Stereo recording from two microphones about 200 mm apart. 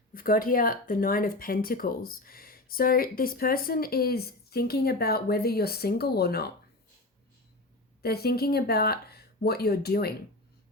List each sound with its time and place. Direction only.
0.1 s speech: 45° left (ahead or behind)
8.0 s speech: 50° left (ahead or behind)